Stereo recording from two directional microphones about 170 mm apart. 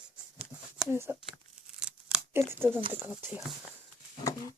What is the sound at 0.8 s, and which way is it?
Speech, 15° right (ahead or behind).